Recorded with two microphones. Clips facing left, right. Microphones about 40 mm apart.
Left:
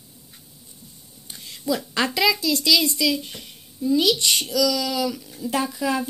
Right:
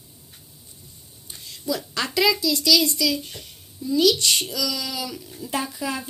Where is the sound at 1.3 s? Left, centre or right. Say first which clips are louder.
Left 3 dB; left.